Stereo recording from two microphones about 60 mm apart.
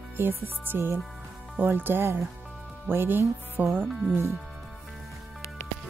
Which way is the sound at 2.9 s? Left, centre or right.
Right.